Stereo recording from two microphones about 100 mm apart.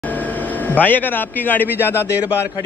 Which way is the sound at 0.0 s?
15° left (ahead or behind).